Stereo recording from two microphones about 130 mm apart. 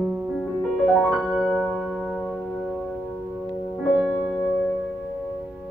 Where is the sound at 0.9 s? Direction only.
Centre (ahead or behind).